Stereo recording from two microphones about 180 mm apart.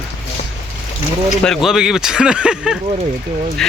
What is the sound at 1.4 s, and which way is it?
Speech, centre (ahead or behind).